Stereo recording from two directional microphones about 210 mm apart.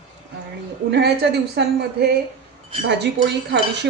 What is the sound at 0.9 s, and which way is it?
Speech, 50° right (ahead or behind).